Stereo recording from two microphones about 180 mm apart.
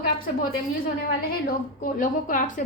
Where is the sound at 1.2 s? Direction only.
55° left (ahead or behind).